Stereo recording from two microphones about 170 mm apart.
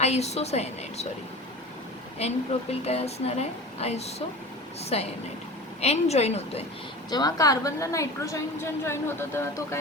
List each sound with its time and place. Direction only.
0.0 s a woman's voice: 40° left (ahead or behind)
2.1 s a woman's voice: 40° left (ahead or behind)
7.1 s a woman's voice: 25° left (ahead or behind)